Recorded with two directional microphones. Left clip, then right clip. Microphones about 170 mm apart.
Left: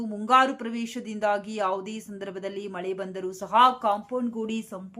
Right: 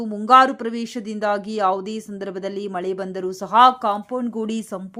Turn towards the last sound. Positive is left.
turn(degrees=-35)  # may be behind; listen again after turning